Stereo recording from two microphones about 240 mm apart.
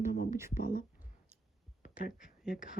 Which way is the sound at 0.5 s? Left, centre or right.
Left.